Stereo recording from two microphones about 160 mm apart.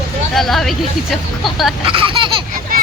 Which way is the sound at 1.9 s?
35° right (ahead or behind).